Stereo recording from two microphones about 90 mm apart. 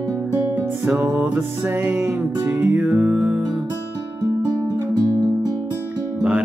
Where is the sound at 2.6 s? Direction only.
15° right (ahead or behind).